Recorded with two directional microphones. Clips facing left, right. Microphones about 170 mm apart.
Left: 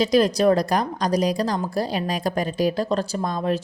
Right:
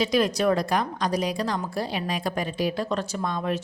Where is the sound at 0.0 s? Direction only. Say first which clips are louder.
Left 5 dB; 35° left (ahead or behind).